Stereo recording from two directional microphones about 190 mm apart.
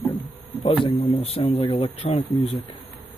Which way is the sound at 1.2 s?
30° left (ahead or behind).